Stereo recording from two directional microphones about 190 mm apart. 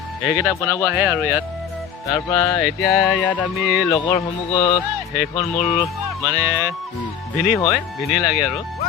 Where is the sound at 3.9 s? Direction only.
20° left (ahead or behind).